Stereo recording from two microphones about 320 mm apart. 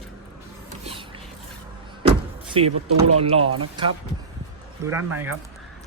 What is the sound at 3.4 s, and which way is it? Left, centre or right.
Speech, right.